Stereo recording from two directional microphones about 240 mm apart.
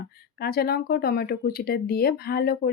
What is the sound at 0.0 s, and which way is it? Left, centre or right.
Speech, left.